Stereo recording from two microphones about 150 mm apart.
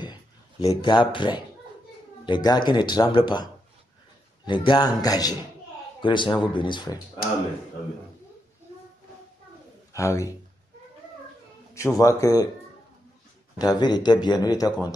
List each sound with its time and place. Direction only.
0.0 s a sound: 25° left (ahead or behind)
2.2 s speech: 30° left (ahead or behind)
4.5 s speech: 30° left (ahead or behind)
9.9 s speech: 20° left (ahead or behind)
11.7 s speech: 20° left (ahead or behind)
13.6 s speech: 25° left (ahead or behind)